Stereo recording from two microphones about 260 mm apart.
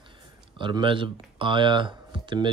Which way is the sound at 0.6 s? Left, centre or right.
Centre.